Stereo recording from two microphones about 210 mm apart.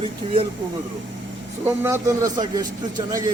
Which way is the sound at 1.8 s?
15° right (ahead or behind).